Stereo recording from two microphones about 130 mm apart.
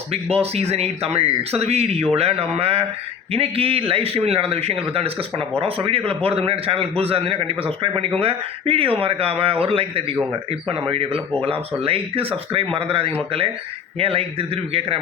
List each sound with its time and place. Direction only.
0.1 s a man's voice: 50° right (ahead or behind)